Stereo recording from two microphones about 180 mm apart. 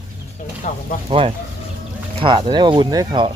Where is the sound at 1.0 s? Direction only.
30° right (ahead or behind).